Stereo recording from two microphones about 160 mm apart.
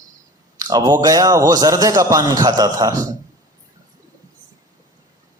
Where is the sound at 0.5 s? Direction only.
25° right (ahead or behind).